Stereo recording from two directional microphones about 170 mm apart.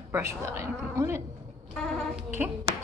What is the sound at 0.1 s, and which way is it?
Speech, 15° right (ahead or behind).